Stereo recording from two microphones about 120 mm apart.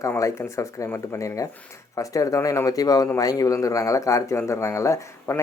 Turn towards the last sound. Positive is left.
turn(degrees=25)  # may be behind; listen again after turning